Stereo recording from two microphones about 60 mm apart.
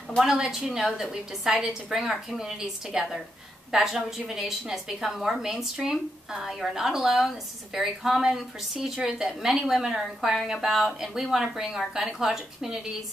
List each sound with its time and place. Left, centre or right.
0.2 s a woman's voice: centre